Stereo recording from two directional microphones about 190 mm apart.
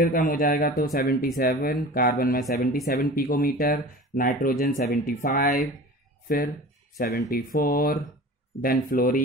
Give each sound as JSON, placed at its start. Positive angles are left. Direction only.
{"t": 0.1, "sound": "speech", "side_deg": 45}
{"t": 5.5, "sound": "speech", "side_deg": 0}
{"t": 6.2, "sound": "speech", "side_deg": 45}